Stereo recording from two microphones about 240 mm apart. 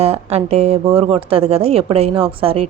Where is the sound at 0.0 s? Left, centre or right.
Right.